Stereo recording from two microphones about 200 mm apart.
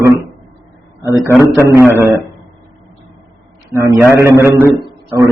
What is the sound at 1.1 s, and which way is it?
Speech, 10° left (ahead or behind).